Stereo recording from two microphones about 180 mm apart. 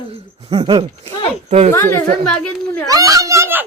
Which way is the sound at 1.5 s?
35° right (ahead or behind).